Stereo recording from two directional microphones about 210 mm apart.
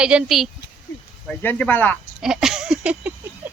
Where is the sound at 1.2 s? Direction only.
10° left (ahead or behind).